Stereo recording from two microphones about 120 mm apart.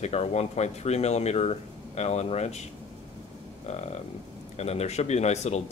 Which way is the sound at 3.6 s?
65° left (ahead or behind).